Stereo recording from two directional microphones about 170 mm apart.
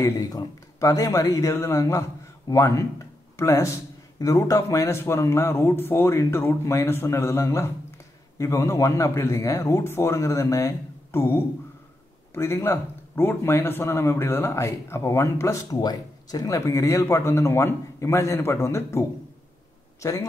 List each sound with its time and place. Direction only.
0.0 s speech: 20° left (ahead or behind)